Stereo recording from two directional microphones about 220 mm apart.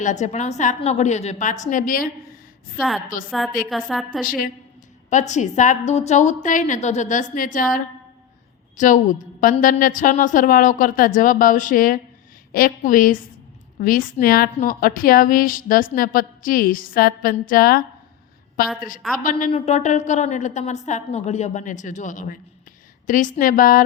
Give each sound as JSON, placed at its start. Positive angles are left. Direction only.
{"t": 0.0, "sound": "a woman's voice", "side_deg": 30}
{"t": 3.2, "sound": "a woman's voice", "side_deg": 0}
{"t": 4.2, "sound": "a woman's voice", "side_deg": 40}
{"t": 8.8, "sound": "a woman's voice", "side_deg": 35}